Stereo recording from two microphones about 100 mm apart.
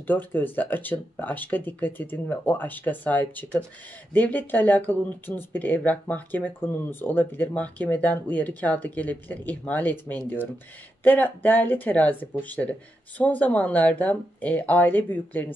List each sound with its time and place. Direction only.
0.0 s speech: 20° left (ahead or behind)